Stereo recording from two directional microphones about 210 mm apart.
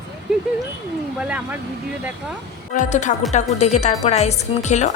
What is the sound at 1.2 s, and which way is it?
Vehicle, 5° right (ahead or behind).